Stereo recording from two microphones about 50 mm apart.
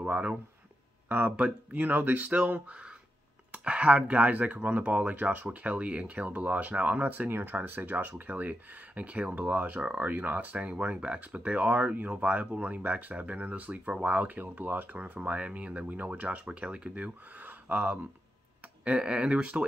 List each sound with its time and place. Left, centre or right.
0.0 s speech: right
1.0 s a sound: right
1.3 s speech: right
7.2 s speech: right
18.9 s speech: right